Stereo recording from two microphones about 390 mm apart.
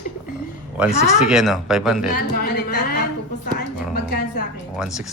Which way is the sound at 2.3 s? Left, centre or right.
Left.